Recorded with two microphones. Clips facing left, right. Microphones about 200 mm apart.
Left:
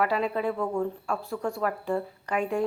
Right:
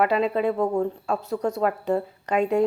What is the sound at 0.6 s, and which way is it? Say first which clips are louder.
Speech: right 5 dB; 40° right (ahead or behind).